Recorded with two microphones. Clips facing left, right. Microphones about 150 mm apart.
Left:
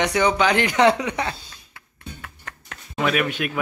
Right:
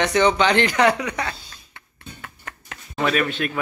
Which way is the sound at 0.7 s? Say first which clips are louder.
Left 1 dB; 25° left (ahead or behind).